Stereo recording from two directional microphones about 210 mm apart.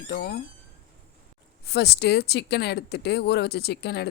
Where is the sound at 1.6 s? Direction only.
50° left (ahead or behind).